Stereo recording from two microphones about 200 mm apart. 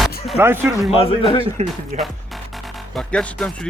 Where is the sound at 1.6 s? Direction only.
30° right (ahead or behind).